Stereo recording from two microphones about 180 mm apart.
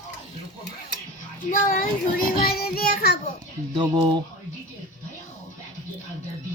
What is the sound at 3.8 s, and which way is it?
Speech, 25° right (ahead or behind).